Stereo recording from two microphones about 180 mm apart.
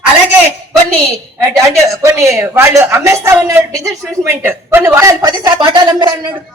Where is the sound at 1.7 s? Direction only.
15° right (ahead or behind).